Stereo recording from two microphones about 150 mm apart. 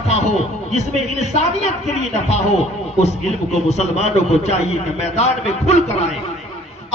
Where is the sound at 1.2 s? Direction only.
50° left (ahead or behind).